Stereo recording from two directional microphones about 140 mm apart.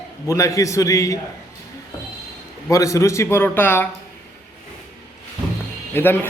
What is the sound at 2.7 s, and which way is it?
Speech, 20° left (ahead or behind).